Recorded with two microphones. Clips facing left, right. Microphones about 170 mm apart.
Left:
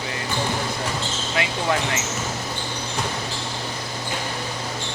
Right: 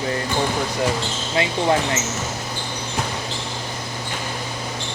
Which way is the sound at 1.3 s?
30° right (ahead or behind).